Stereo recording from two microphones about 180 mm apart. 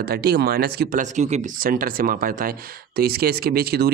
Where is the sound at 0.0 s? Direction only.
60° right (ahead or behind).